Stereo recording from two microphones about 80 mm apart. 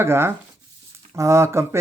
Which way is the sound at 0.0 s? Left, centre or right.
Right.